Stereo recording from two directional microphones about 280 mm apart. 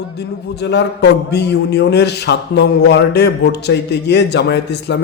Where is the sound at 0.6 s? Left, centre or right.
Left.